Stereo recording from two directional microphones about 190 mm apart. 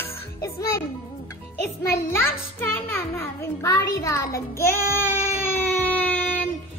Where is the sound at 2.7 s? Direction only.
15° left (ahead or behind).